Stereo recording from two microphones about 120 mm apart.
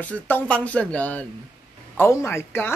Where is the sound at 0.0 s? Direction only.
10° left (ahead or behind).